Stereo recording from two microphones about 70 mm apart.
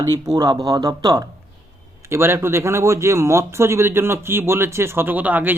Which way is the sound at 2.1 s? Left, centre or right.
Right.